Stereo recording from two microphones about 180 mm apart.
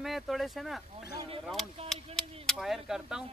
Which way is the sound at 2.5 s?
Centre (ahead or behind).